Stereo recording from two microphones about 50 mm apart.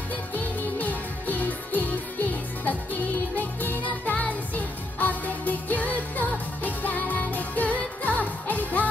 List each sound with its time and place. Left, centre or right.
0.7 s music: left